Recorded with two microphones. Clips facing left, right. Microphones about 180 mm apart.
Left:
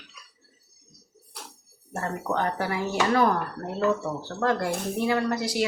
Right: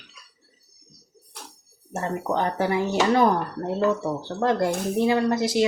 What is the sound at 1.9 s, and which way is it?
Speech, 20° right (ahead or behind).